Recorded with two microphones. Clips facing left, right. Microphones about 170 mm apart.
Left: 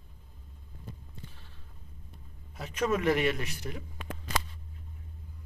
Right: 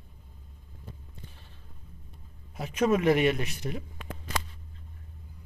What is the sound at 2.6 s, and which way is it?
A man's voice, 10° right (ahead or behind).